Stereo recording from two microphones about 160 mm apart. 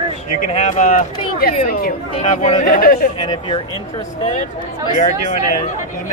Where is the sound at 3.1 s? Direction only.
25° left (ahead or behind).